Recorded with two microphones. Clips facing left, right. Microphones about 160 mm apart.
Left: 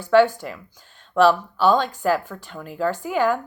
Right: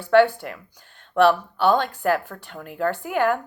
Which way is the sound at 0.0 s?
60° right (ahead or behind).